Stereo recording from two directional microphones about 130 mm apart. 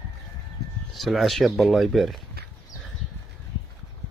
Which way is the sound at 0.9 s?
Centre (ahead or behind).